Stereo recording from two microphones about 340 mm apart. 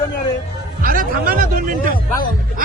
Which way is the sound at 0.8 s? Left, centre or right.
Right.